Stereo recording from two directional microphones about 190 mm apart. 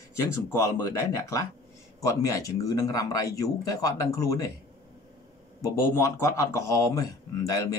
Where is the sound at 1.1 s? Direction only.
15° left (ahead or behind).